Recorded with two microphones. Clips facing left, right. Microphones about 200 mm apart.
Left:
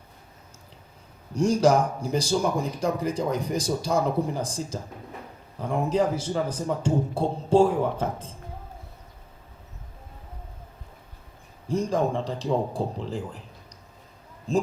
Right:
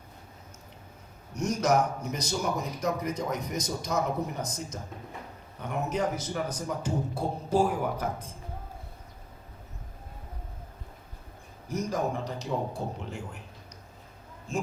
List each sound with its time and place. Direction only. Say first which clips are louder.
1.3 s a man's voice: left 6 dB; 30° left (ahead or behind)
11.7 s speech: left 5 dB; 30° left (ahead or behind)
14.5 s speech: left 8 dB; 35° left (ahead or behind)